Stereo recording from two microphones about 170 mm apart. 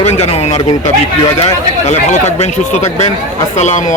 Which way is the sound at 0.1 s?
40° left (ahead or behind).